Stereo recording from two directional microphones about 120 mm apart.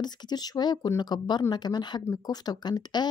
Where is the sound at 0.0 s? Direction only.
35° left (ahead or behind).